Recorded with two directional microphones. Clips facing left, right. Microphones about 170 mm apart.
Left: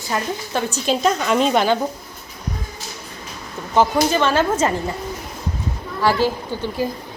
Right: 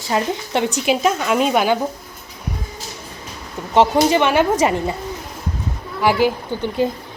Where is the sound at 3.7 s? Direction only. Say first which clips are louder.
Right 3 dB; 20° right (ahead or behind).